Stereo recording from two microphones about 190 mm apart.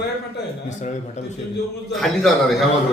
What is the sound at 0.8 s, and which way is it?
Speech, 40° left (ahead or behind).